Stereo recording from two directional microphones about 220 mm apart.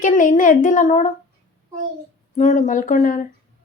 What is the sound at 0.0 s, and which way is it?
Speech, 35° left (ahead or behind).